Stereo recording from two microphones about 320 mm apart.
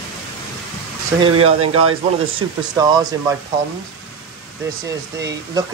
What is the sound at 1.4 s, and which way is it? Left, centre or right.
Speech, right.